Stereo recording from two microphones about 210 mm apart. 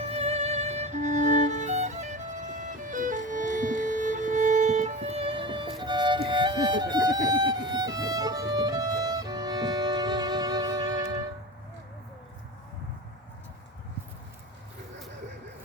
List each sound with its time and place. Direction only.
0.0 s music: 30° right (ahead or behind)